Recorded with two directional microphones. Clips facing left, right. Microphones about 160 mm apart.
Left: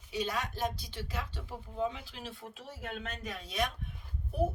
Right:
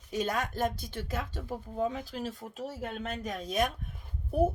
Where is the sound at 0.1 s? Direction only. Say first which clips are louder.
Right 4 dB; 50° right (ahead or behind).